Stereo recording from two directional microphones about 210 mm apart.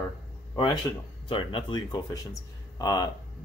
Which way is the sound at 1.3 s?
25° left (ahead or behind).